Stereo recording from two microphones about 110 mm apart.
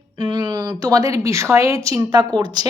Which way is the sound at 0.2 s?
40° right (ahead or behind).